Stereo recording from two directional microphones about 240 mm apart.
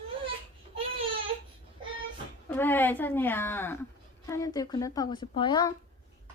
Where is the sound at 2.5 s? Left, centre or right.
Centre.